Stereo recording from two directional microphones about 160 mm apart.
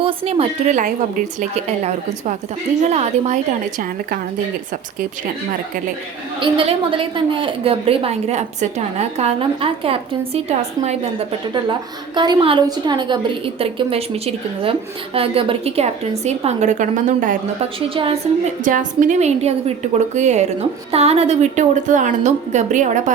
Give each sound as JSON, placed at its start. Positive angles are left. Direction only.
{"t": 0.0, "sound": "a woman's voice", "side_deg": -35}
{"t": 6.4, "sound": "a woman's voice", "side_deg": -35}
{"t": 11.5, "sound": "a woman's voice", "side_deg": -30}
{"t": 17.6, "sound": "a woman's voice", "side_deg": -35}
{"t": 18.6, "sound": "a woman's voice", "side_deg": -55}